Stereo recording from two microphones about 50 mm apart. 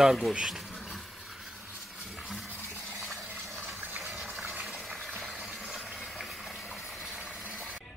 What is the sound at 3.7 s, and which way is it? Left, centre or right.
Water, right.